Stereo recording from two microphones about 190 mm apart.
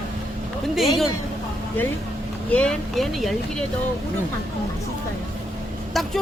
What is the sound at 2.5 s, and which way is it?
Speech, 5° left (ahead or behind).